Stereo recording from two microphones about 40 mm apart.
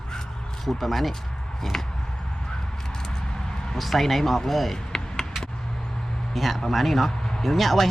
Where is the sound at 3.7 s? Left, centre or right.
Centre.